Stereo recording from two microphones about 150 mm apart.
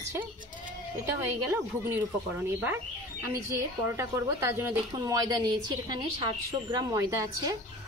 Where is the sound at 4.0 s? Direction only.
20° right (ahead or behind).